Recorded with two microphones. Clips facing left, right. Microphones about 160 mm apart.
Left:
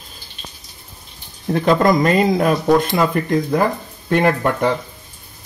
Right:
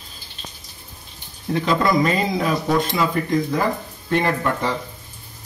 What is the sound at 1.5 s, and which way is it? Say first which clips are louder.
Speech: left 4 dB; 50° left (ahead or behind).